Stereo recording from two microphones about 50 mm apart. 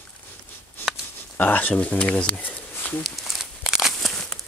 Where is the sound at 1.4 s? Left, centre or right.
Left.